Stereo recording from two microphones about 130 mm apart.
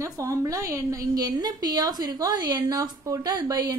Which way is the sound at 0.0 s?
25° right (ahead or behind).